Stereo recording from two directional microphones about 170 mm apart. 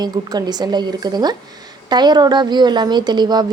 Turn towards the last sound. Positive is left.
turn(degrees=-25)  # may be behind; listen again after turning